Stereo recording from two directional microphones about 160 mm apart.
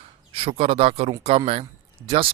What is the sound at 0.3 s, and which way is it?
A man's voice, 35° right (ahead or behind).